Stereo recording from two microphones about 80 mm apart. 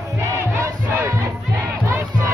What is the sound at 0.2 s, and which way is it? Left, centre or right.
Crowd, right.